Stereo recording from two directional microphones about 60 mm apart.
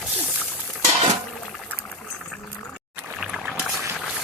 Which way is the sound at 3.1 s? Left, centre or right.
Centre.